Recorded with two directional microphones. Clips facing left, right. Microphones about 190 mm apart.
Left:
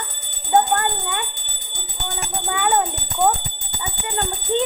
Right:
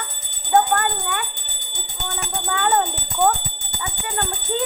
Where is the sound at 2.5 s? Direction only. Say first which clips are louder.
Even; 10° left (ahead or behind).